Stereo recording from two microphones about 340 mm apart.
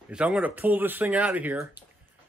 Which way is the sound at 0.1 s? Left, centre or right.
Centre.